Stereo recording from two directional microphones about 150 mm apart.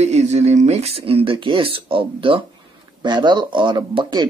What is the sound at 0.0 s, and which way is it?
Speech, 45° right (ahead or behind).